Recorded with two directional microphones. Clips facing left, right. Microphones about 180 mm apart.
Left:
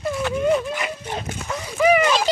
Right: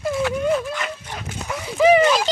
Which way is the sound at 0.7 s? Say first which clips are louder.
Left 1 dB; 10° left (ahead or behind).